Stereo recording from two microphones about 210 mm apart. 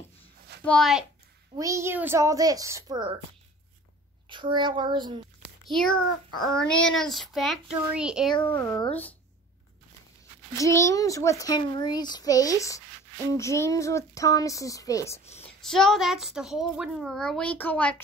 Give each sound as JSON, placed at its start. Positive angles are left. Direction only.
{"t": 0.7, "sound": "a child's voice", "side_deg": 0}
{"t": 1.6, "sound": "a child's voice", "side_deg": -15}
{"t": 4.3, "sound": "a child's voice", "side_deg": -20}
{"t": 5.7, "sound": "a child's voice", "side_deg": 5}
{"t": 8.5, "sound": "a child's voice", "side_deg": 10}
{"t": 10.6, "sound": "a child's voice", "side_deg": 15}
{"t": 15.6, "sound": "a child's voice", "side_deg": 0}